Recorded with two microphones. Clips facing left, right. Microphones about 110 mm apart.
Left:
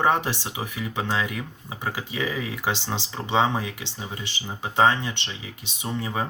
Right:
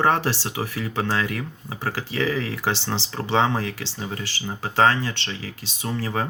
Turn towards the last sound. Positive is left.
turn(degrees=15)  # may be behind; listen again after turning